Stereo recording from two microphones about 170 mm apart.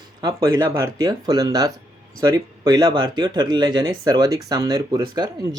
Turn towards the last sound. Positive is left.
turn(degrees=-25)  # may be behind; listen again after turning